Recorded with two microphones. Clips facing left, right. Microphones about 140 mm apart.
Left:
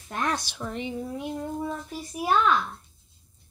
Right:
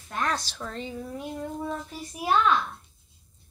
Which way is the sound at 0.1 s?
15° left (ahead or behind).